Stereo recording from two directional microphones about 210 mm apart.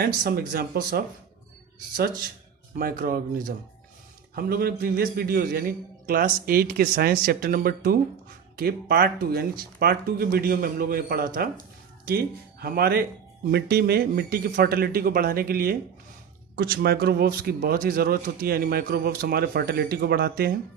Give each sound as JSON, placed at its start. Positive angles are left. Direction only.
{"t": 0.0, "sound": "speech", "side_deg": -45}
{"t": 2.7, "sound": "speech", "side_deg": -45}